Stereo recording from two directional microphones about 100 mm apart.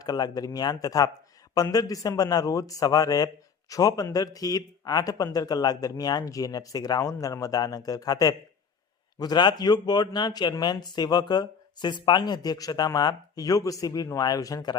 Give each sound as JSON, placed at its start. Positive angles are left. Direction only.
{"t": 0.0, "sound": "a man's voice", "side_deg": 40}